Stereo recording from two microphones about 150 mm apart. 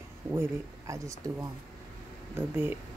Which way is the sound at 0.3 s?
20° right (ahead or behind).